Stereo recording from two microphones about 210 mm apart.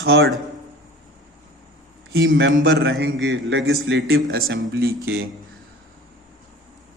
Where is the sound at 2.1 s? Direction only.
55° right (ahead or behind).